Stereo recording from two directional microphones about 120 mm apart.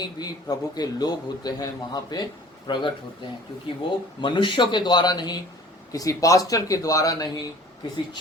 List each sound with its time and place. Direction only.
0.0 s a man's voice: 35° left (ahead or behind)
4.2 s a man's voice: 40° left (ahead or behind)